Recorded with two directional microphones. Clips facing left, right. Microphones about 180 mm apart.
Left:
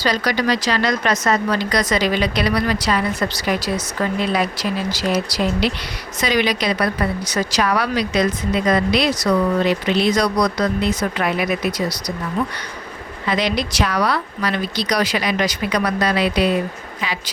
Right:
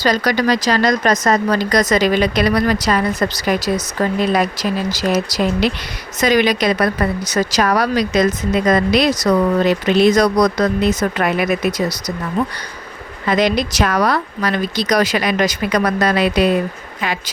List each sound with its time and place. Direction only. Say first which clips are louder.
0.0 s speech: right 3 dB; 45° right (ahead or behind)
13.2 s speech: right 5 dB; 50° right (ahead or behind)